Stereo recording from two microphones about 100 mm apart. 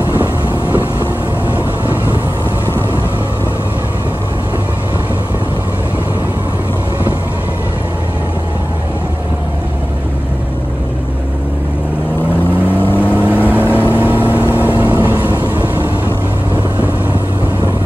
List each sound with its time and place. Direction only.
12.6 s vehicle: 20° left (ahead or behind)